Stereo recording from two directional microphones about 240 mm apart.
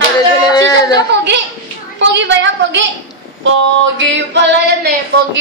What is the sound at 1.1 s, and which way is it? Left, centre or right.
Female singing, right.